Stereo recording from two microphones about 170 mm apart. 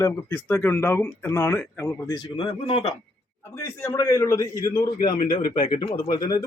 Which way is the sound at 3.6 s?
20° left (ahead or behind).